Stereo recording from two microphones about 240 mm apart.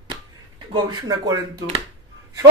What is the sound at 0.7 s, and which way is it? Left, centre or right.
Speech, centre.